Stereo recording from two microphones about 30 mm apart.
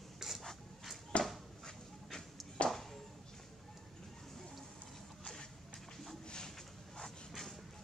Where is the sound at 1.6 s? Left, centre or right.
Centre.